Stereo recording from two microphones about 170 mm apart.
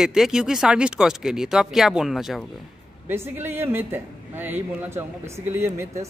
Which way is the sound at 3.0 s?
10° right (ahead or behind).